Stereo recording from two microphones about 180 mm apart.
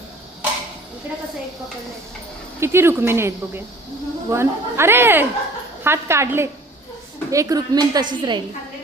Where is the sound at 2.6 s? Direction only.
15° right (ahead or behind).